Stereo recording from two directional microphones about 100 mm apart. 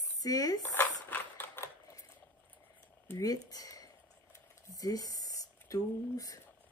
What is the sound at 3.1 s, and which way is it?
Speech, 35° left (ahead or behind).